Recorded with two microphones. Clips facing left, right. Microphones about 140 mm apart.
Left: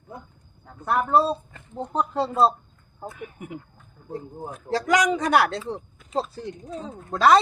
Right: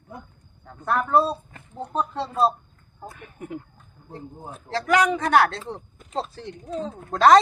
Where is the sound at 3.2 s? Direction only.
15° left (ahead or behind).